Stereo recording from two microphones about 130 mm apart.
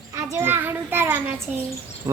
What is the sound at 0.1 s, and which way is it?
A child's voice, 25° right (ahead or behind).